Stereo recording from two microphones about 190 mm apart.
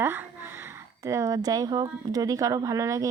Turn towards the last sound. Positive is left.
turn(degrees=-15)  # may be behind; listen again after turning